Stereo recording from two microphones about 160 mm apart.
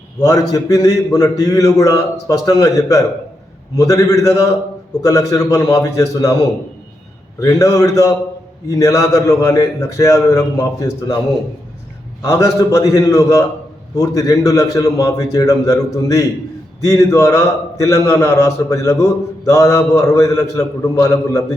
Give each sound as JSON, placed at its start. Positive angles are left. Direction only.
{"t": 0.2, "sound": "a man's voice", "side_deg": 20}
{"t": 7.3, "sound": "a man's voice", "side_deg": 20}
{"t": 12.2, "sound": "a man's voice", "side_deg": 20}